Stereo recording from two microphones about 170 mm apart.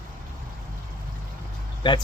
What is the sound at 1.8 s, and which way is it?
Speech, 30° left (ahead or behind).